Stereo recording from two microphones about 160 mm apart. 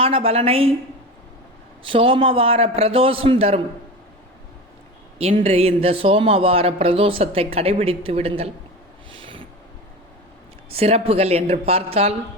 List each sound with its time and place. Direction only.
0.0 s speech: 35° right (ahead or behind)
1.8 s speech: 35° right (ahead or behind)
5.4 s speech: 40° right (ahead or behind)
9.1 s a sound: 35° right (ahead or behind)
10.7 s speech: 40° right (ahead or behind)